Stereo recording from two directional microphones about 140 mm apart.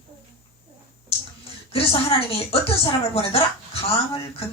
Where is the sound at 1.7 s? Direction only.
45° left (ahead or behind).